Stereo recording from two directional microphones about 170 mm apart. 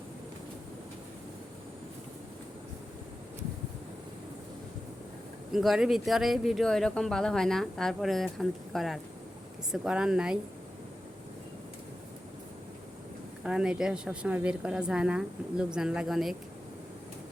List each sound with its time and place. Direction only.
5.5 s speech: centre (ahead or behind)
13.4 s speech: 5° right (ahead or behind)